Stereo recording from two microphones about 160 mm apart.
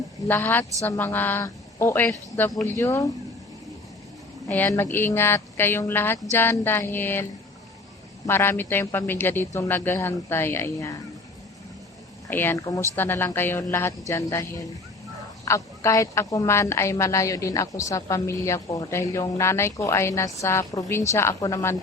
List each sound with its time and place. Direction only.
0.3 s a woman's voice: 10° left (ahead or behind)
4.4 s a woman's voice: 10° left (ahead or behind)
8.3 s a woman's voice: 15° left (ahead or behind)
12.3 s a woman's voice: 15° left (ahead or behind)